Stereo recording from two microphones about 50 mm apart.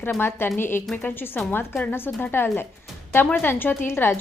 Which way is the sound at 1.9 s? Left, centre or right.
Left.